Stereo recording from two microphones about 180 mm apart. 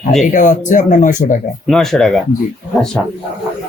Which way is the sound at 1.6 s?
Centre (ahead or behind).